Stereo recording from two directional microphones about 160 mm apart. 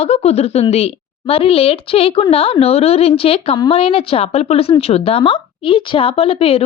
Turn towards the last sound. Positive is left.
turn(degrees=35)  # may be behind; listen again after turning